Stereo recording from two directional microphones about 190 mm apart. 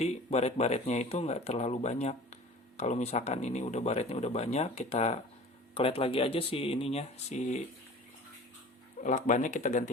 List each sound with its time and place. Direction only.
0.0 s speech: 35° left (ahead or behind)
9.0 s speech: 40° left (ahead or behind)